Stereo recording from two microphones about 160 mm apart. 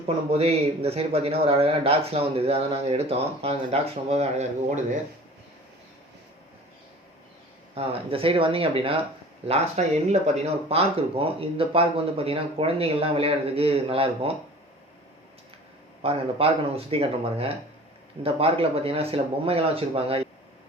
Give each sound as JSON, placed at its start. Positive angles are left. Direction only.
{"t": 0.0, "sound": "speech", "side_deg": -40}
{"t": 7.8, "sound": "speech", "side_deg": -35}
{"t": 16.0, "sound": "speech", "side_deg": -35}